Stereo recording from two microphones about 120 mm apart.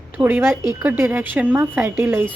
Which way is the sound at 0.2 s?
15° right (ahead or behind).